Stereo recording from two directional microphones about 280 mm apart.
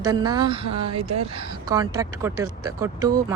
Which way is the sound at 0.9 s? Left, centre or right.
Right.